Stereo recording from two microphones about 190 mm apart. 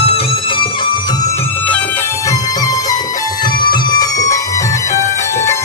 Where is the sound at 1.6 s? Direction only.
10° left (ahead or behind).